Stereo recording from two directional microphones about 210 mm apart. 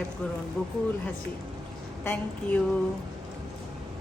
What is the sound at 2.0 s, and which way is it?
Speech, 10° left (ahead or behind).